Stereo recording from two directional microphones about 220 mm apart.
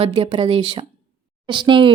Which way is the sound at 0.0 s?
25° right (ahead or behind).